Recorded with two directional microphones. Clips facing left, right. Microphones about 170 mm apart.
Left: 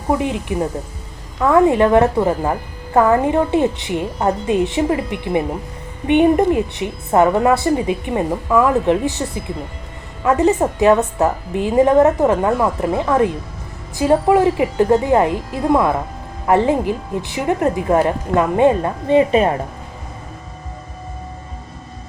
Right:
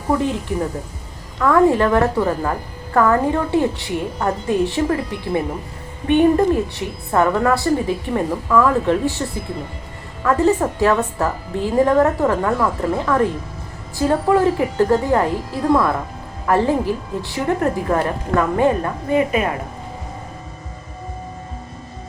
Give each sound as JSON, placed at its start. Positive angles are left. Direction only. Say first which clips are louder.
{"t": 0.1, "sound": "a woman's voice", "louder": "left 1 dB", "side_deg": 15}